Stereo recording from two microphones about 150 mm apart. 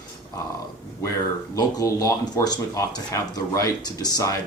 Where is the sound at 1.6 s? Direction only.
25° left (ahead or behind).